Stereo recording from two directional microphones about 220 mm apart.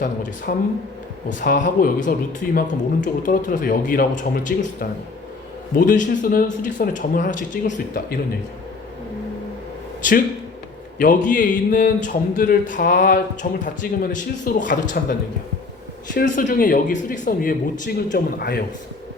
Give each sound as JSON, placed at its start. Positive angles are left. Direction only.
{"t": 0.5, "sound": "a man's voice", "side_deg": 40}
{"t": 10.0, "sound": "a man's voice", "side_deg": 35}
{"t": 16.1, "sound": "a man's voice", "side_deg": 35}